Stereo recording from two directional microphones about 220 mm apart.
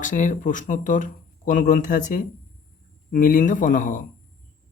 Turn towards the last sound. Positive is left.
turn(degrees=35)  # may be behind; listen again after turning